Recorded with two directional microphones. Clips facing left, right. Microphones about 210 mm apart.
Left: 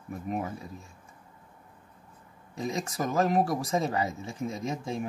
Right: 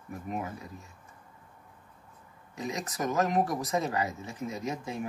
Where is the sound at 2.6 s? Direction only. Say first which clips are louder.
Left 2 dB; 30° left (ahead or behind).